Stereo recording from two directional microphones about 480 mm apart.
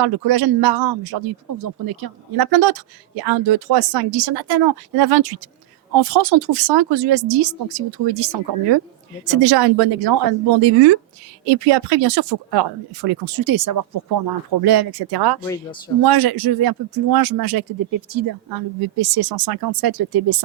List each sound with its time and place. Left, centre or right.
0.0 s speech: right